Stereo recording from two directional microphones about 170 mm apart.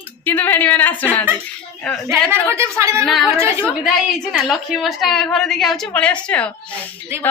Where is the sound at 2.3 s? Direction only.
15° right (ahead or behind).